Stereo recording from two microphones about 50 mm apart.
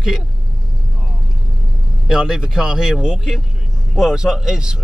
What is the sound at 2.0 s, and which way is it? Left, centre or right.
Speech, centre.